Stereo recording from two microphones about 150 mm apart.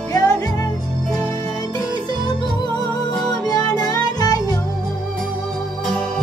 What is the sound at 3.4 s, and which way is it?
Music, 25° left (ahead or behind).